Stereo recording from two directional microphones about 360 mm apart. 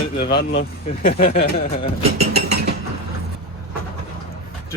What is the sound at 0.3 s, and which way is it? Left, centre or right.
Speech, centre.